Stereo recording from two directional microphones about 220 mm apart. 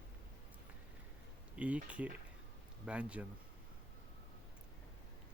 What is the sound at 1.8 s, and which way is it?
Speech, 5° right (ahead or behind).